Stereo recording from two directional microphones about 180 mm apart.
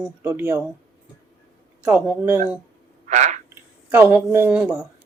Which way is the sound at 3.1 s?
40° right (ahead or behind).